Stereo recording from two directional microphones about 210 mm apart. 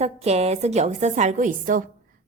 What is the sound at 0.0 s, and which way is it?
A woman's voice, 30° right (ahead or behind).